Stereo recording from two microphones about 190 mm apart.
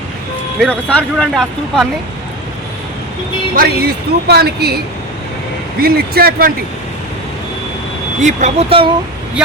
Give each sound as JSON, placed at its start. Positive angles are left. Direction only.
{"t": 0.6, "sound": "speech", "side_deg": 5}
{"t": 3.5, "sound": "speech", "side_deg": -55}
{"t": 5.8, "sound": "speech", "side_deg": -55}
{"t": 8.2, "sound": "speech", "side_deg": -35}